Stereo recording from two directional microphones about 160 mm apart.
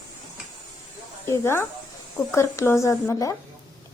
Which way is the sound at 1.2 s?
15° left (ahead or behind).